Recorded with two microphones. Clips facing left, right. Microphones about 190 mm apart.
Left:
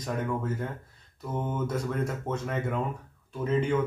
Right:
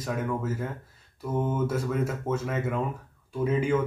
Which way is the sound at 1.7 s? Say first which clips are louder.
Right 2 dB; 5° right (ahead or behind).